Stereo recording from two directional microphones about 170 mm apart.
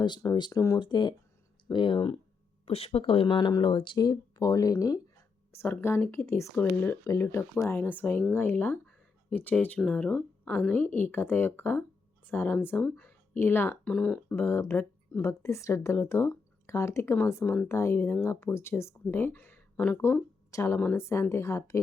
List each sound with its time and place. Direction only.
0.0 s speech: 25° left (ahead or behind)